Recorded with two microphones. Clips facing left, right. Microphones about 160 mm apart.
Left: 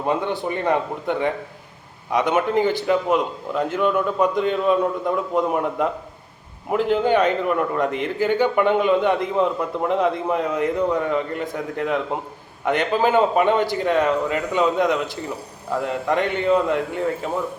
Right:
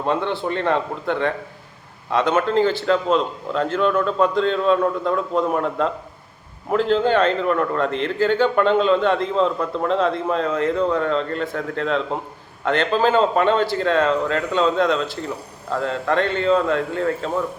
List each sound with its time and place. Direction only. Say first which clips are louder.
0.0 s a man's voice: right 1 dB; 15° left (ahead or behind)